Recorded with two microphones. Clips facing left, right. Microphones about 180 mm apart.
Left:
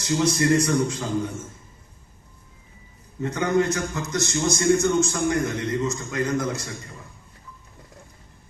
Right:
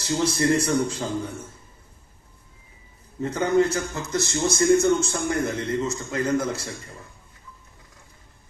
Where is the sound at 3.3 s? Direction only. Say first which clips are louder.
Right 1 dB; 30° right (ahead or behind).